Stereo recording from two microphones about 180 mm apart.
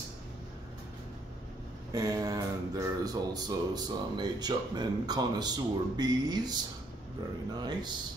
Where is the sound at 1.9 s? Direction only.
20° right (ahead or behind).